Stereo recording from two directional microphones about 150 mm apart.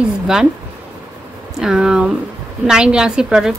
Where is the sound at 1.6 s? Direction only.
5° right (ahead or behind).